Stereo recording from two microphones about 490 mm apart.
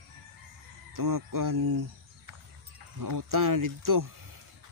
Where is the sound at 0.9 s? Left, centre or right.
Right.